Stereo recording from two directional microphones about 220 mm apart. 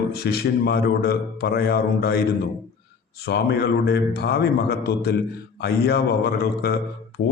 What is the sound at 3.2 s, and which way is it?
A man's voice, 50° left (ahead or behind).